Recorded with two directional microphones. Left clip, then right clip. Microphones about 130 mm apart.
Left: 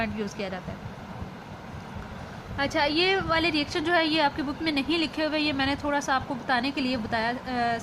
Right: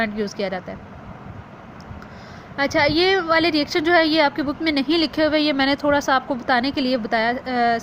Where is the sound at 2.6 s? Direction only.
40° right (ahead or behind).